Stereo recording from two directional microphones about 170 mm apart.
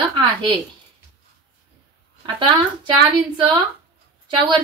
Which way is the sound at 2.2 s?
30° right (ahead or behind).